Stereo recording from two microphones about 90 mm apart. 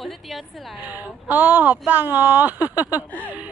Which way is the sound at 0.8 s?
20° right (ahead or behind).